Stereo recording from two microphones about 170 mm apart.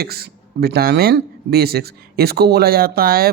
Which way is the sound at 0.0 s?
65° right (ahead or behind).